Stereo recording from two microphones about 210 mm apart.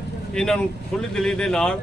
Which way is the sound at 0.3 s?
5° left (ahead or behind).